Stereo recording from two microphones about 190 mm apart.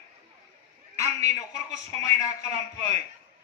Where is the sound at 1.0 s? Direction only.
15° left (ahead or behind).